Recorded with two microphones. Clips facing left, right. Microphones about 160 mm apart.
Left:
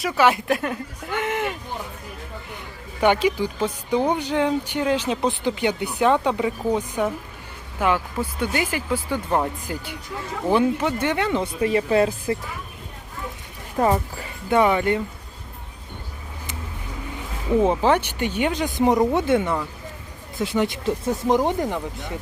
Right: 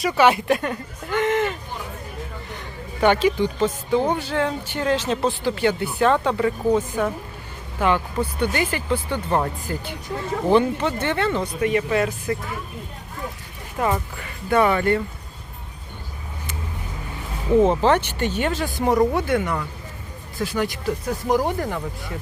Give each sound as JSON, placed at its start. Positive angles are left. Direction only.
{"t": 0.0, "sound": "speech", "side_deg": 0}
{"t": 3.0, "sound": "speech", "side_deg": 10}
{"t": 11.4, "sound": "speech", "side_deg": 30}
{"t": 13.7, "sound": "speech", "side_deg": 30}
{"t": 14.5, "sound": "speech", "side_deg": 15}
{"t": 17.6, "sound": "speech", "side_deg": 10}